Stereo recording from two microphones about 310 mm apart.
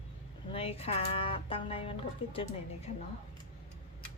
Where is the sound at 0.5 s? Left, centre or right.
Centre.